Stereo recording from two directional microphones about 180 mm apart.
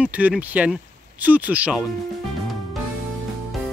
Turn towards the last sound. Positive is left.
turn(degrees=-10)  # may be behind; listen again after turning